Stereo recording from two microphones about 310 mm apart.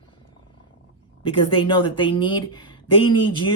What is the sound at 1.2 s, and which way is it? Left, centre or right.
Speech, centre.